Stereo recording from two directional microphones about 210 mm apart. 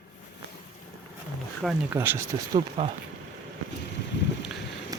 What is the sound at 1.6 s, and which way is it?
Speech, 10° right (ahead or behind).